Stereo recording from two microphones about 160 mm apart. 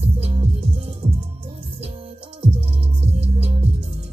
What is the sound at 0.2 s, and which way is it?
Music, 35° right (ahead or behind).